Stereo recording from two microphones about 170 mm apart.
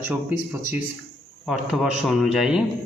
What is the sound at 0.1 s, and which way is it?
A man's voice, 10° right (ahead or behind).